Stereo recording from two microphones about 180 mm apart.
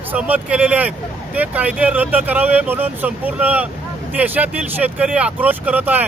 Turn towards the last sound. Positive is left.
turn(degrees=-10)  # may be behind; listen again after turning